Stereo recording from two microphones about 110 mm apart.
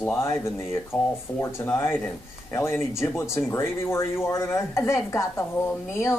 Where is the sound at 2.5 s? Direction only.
25° left (ahead or behind).